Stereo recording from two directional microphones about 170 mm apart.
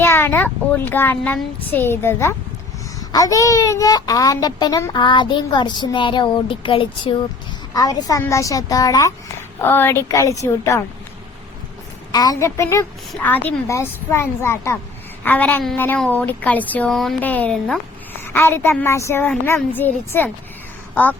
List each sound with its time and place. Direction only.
0.0 s a woman's voice: 15° left (ahead or behind)
12.1 s a child's voice: 20° left (ahead or behind)